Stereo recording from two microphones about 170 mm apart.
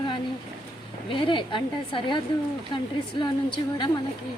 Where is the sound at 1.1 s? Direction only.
30° left (ahead or behind).